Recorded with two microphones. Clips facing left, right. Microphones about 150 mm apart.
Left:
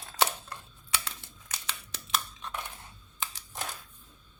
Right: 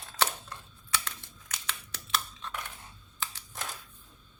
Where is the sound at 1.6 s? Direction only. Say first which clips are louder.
Right 1 dB; 15° left (ahead or behind).